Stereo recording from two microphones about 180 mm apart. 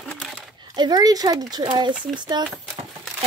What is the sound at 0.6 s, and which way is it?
Speech, 25° right (ahead or behind).